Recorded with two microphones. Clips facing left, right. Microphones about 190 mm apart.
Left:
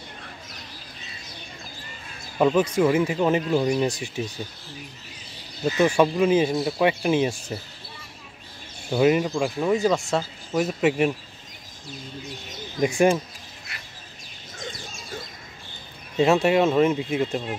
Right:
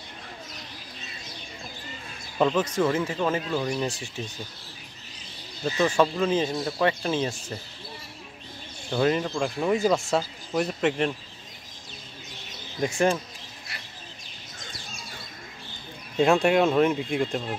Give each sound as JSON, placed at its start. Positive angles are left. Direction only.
{"t": 2.3, "sound": "speech", "side_deg": 10}
{"t": 5.8, "sound": "speech", "side_deg": 10}
{"t": 8.9, "sound": "speech", "side_deg": 10}
{"t": 12.8, "sound": "speech", "side_deg": 15}
{"t": 16.2, "sound": "speech", "side_deg": 0}